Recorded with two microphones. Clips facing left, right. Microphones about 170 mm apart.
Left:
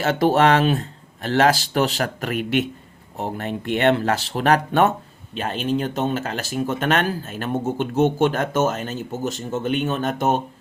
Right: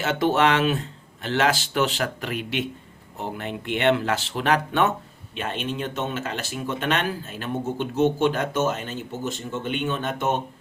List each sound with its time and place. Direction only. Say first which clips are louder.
0.0 s speech: left 4 dB; 40° left (ahead or behind)